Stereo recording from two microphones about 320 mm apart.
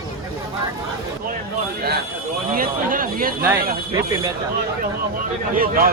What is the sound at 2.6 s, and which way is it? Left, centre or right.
Speech, right.